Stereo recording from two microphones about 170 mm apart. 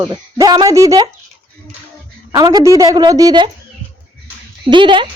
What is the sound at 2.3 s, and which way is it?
A woman's voice, 25° right (ahead or behind).